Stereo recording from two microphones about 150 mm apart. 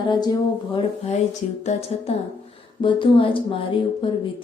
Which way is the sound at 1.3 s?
45° left (ahead or behind).